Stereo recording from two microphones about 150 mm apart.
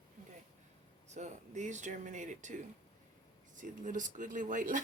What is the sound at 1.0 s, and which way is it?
Speech, 50° right (ahead or behind).